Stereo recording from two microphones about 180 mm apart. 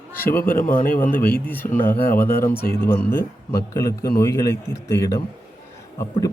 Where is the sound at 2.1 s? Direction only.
55° left (ahead or behind).